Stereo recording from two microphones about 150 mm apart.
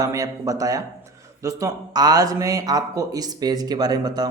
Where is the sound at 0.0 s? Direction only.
20° right (ahead or behind).